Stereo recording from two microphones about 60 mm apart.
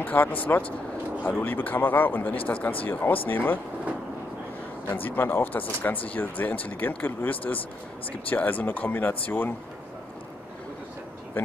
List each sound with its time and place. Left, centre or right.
0.0 s speech: left
4.8 s speech: left
11.4 s a sound: left